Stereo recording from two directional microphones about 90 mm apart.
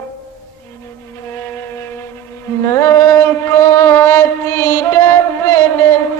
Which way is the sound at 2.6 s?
30° left (ahead or behind).